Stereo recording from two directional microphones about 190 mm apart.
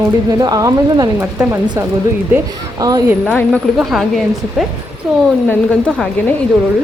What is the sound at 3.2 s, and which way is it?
Speech, centre (ahead or behind).